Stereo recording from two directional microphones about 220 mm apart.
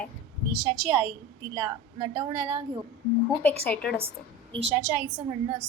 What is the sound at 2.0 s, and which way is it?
Speech, 25° right (ahead or behind).